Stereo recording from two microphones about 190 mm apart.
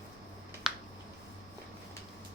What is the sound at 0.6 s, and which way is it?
Finger snapping, 5° right (ahead or behind).